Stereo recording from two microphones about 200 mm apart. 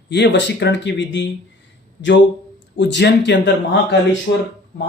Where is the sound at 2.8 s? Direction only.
60° left (ahead or behind).